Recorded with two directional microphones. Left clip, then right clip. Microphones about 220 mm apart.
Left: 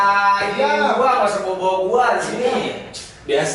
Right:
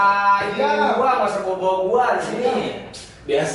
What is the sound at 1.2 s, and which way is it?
Speech, 20° right (ahead or behind).